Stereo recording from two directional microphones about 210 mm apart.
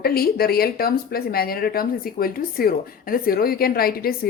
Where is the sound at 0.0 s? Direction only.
45° left (ahead or behind).